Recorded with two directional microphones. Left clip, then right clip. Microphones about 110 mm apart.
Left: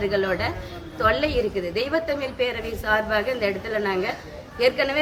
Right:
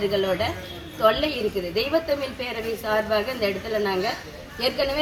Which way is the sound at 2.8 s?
35° left (ahead or behind).